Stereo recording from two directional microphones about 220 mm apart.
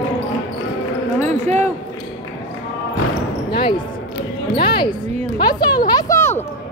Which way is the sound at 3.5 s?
20° left (ahead or behind).